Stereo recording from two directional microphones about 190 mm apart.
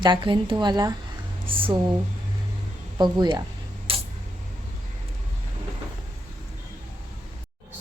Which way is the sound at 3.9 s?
30° right (ahead or behind).